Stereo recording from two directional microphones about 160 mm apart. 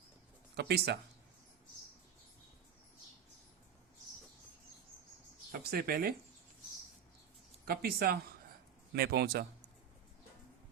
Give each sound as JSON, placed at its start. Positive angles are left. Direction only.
{"t": 0.5, "sound": "speech", "side_deg": -90}
{"t": 5.5, "sound": "speech", "side_deg": -70}
{"t": 7.6, "sound": "a man's voice", "side_deg": -75}